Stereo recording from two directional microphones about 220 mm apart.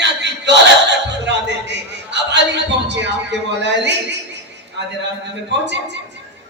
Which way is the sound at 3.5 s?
50° right (ahead or behind).